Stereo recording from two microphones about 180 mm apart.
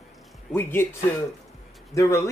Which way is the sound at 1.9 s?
15° left (ahead or behind).